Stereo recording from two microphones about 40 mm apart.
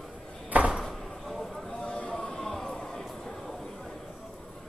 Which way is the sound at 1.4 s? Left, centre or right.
Centre.